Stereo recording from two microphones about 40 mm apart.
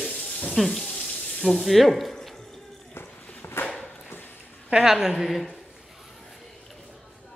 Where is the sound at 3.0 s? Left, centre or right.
Left.